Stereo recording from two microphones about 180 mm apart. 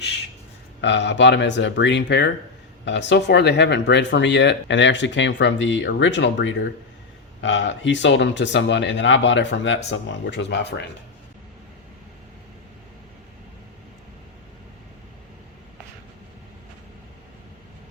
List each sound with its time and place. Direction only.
0.8 s speech: 85° left